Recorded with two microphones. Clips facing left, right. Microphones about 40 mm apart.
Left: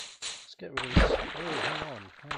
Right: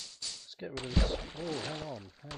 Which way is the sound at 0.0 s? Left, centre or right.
Left.